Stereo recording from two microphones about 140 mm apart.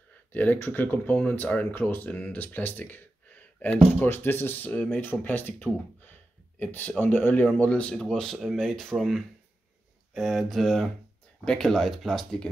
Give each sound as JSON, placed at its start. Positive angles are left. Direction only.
{"t": 0.3, "sound": "speech", "side_deg": 15}